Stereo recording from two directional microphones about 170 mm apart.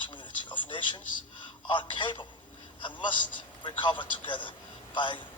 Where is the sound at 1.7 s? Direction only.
30° left (ahead or behind).